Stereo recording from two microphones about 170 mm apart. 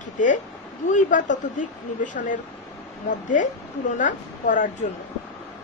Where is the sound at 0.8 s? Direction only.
50° left (ahead or behind).